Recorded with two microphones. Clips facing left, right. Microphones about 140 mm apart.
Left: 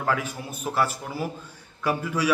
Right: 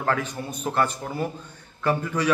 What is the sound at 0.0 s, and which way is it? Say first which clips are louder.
A man's voice: right 1 dB; 10° left (ahead or behind).